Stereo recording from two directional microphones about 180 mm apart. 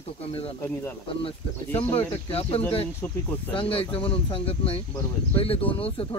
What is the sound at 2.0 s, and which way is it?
Speech, 30° left (ahead or behind).